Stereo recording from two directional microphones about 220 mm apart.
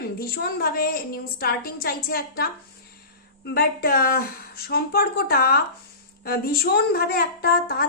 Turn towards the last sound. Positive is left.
turn(degrees=45)  # may be behind; listen again after turning